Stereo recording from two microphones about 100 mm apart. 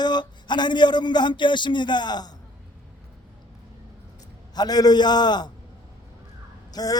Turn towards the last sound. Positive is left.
turn(degrees=40)  # may be behind; listen again after turning